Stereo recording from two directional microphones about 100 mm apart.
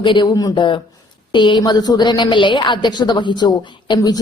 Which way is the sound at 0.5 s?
55° left (ahead or behind).